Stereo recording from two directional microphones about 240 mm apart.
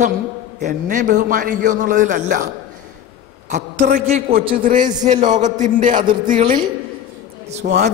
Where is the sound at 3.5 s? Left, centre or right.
Right.